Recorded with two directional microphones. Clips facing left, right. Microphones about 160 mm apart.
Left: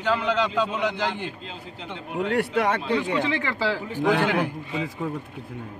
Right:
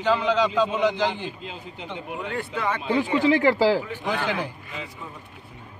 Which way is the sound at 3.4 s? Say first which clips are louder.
Right 7 dB; 35° right (ahead or behind).